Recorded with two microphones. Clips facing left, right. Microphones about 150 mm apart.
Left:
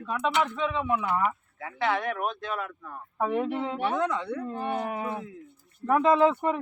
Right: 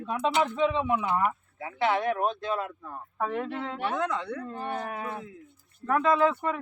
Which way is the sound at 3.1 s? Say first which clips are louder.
Left 4 dB; 15° left (ahead or behind).